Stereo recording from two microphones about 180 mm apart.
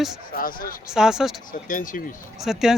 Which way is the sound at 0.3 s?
50° left (ahead or behind).